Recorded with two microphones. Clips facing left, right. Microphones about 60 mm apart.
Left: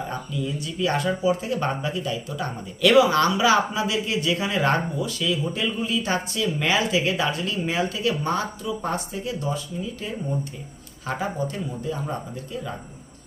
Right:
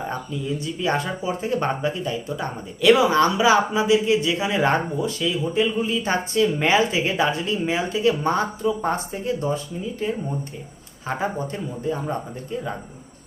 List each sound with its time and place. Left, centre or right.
0.4 s speech: right
11.0 s speech: right